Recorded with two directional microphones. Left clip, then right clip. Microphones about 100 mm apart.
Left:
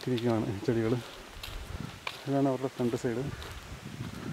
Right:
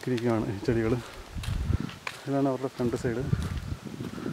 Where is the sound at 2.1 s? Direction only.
5° right (ahead or behind).